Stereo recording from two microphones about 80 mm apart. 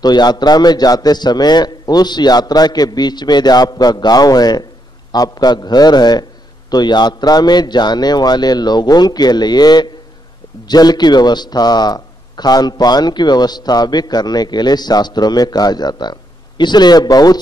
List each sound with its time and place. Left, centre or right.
0.0 s a man's voice: left